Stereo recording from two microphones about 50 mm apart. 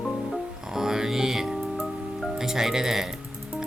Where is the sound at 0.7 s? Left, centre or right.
Centre.